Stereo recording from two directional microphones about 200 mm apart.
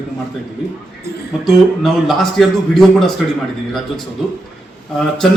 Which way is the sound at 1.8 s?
Centre (ahead or behind).